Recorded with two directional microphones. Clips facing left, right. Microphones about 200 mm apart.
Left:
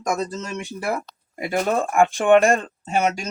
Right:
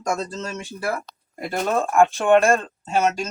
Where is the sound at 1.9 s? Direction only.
15° left (ahead or behind).